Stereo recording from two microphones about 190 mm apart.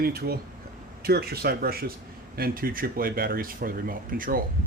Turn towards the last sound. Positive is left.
turn(degrees=-50)  # may be behind; listen again after turning